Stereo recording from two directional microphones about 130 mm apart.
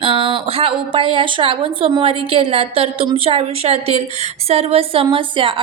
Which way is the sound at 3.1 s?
45° right (ahead or behind).